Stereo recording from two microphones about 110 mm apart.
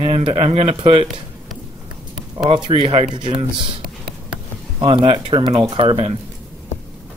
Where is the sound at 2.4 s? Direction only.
55° right (ahead or behind).